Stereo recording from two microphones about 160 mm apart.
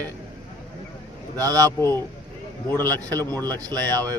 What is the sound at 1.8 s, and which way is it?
A man's voice, 15° left (ahead or behind).